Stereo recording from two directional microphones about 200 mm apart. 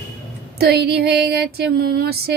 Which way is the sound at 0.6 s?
55° right (ahead or behind).